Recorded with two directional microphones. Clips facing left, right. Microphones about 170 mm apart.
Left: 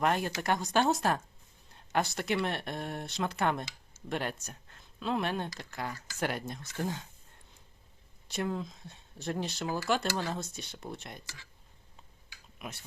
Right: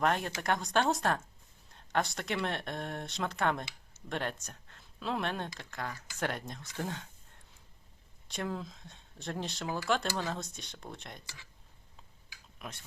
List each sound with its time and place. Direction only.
0.0 s speech: 5° left (ahead or behind)
8.3 s speech: centre (ahead or behind)
12.5 s speech: 5° left (ahead or behind)